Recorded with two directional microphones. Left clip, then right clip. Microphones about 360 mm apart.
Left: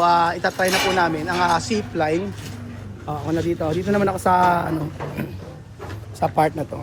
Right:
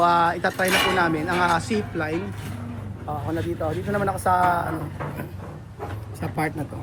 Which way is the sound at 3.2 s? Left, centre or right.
Left.